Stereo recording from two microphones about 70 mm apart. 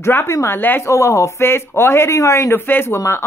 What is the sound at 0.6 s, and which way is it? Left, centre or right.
Speech, left.